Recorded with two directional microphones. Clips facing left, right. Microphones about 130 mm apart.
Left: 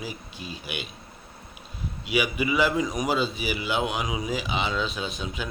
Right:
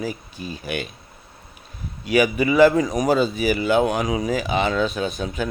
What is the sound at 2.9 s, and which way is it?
Speech, 45° right (ahead or behind).